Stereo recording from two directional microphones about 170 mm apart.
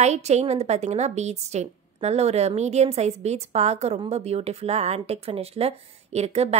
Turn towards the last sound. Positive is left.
turn(degrees=-40)  # may be behind; listen again after turning